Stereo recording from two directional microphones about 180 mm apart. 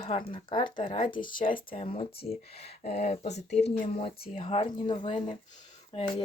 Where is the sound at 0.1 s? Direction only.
30° left (ahead or behind).